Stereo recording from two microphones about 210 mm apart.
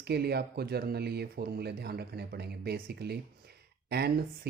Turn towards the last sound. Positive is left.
turn(degrees=-50)  # may be behind; listen again after turning